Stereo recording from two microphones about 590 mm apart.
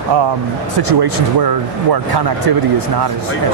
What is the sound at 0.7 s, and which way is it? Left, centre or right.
Speech, right.